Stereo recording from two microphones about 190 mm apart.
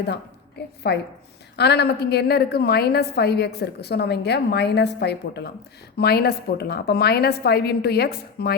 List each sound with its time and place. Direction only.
0.1 s a woman's voice: 60° left (ahead or behind)